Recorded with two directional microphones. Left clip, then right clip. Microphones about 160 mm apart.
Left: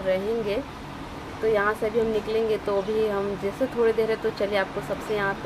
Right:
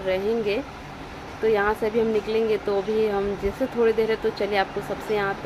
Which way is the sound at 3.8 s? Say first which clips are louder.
Right 2 dB; 15° right (ahead or behind).